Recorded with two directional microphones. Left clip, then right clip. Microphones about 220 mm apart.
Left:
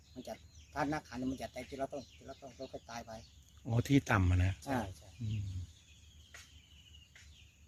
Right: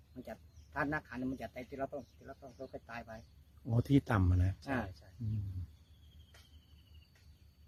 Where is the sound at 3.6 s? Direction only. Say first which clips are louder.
Even; 10° right (ahead or behind).